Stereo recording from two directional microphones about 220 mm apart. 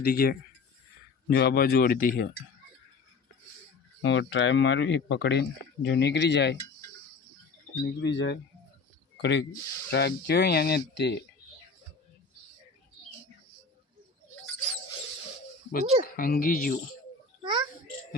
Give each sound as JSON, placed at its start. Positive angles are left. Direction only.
{"t": 0.0, "sound": "speech", "side_deg": 45}
{"t": 4.0, "sound": "speech", "side_deg": 55}
{"t": 8.0, "sound": "speech", "side_deg": 55}
{"t": 15.7, "sound": "speech", "side_deg": 40}
{"t": 17.4, "sound": "babbling", "side_deg": -20}